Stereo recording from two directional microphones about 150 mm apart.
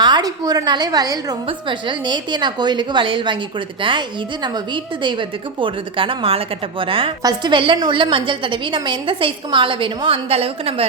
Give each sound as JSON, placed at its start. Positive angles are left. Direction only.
{"t": 0.0, "sound": "a woman's voice", "side_deg": -30}